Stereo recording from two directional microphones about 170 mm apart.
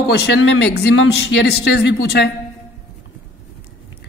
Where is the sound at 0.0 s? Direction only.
70° left (ahead or behind).